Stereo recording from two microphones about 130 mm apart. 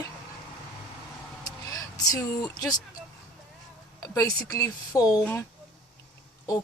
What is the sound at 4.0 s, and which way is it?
Speech, 25° left (ahead or behind).